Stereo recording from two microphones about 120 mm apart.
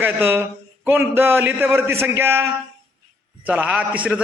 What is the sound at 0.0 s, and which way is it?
A man's voice, 20° right (ahead or behind).